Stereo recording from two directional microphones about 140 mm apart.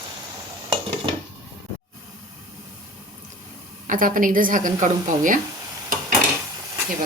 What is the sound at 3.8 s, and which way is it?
Speech, 75° right (ahead or behind).